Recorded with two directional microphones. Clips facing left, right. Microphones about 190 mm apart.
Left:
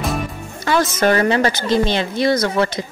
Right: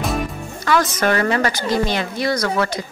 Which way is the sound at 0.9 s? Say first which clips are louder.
Left 3 dB; 25° left (ahead or behind).